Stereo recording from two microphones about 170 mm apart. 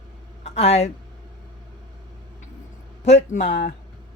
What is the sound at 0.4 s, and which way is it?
Speech, 35° left (ahead or behind).